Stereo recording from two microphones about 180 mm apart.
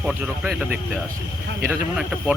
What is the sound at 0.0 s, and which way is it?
Speech, 5° right (ahead or behind).